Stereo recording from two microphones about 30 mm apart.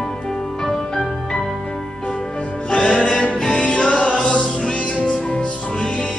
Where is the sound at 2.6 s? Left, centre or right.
Left.